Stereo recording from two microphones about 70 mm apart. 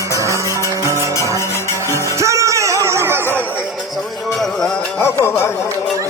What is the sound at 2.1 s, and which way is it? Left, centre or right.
Music, right.